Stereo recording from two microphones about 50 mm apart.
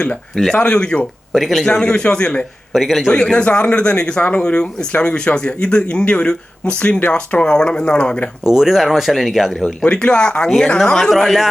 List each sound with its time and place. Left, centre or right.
0.5 s a man's voice: centre
1.3 s speech: centre
1.6 s a man's voice: centre
2.7 s speech: centre
3.1 s a man's voice: centre
8.4 s speech: centre
9.9 s a man's voice: centre